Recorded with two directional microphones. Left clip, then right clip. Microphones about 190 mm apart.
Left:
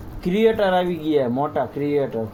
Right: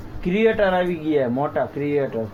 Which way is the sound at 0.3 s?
10° left (ahead or behind).